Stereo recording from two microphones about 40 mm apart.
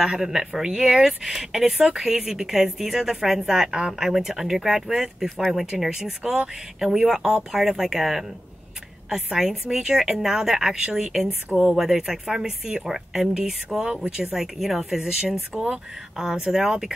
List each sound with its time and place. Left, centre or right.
0.0 s a woman's voice: centre
4.1 s a woman's voice: centre
12.8 s a woman's voice: centre